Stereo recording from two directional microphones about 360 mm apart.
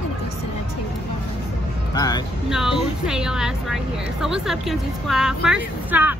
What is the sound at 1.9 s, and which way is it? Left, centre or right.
Speech, centre.